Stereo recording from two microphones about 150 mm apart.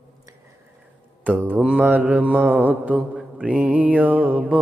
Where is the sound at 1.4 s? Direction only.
10° right (ahead or behind).